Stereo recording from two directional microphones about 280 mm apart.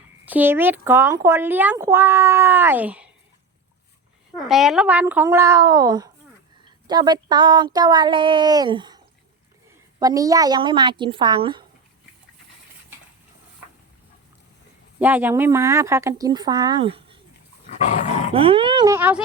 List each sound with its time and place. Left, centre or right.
0.3 s speech: centre
4.4 s speech: centre
10.0 s speech: centre
14.9 s speech: centre
18.3 s speech: centre